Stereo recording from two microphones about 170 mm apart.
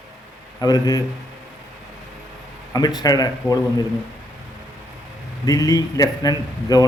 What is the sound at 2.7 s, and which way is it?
Speech, 25° left (ahead or behind).